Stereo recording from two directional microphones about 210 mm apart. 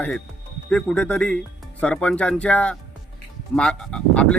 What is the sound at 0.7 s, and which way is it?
Speech, 5° left (ahead or behind).